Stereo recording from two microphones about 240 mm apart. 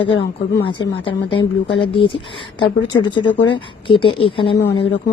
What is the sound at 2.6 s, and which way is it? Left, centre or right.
Speech, centre.